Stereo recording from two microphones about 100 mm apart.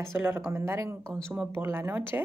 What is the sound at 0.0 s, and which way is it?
Speech, 20° right (ahead or behind).